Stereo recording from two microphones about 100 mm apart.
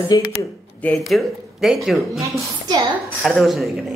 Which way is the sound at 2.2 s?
40° right (ahead or behind).